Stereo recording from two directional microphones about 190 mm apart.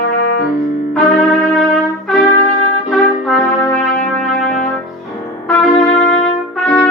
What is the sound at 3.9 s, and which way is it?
Music, centre (ahead or behind).